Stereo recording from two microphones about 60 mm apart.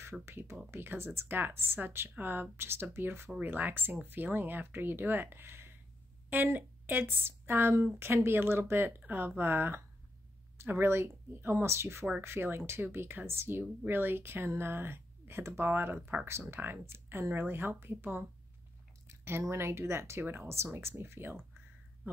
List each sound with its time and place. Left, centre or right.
0.2 s a woman's voice: right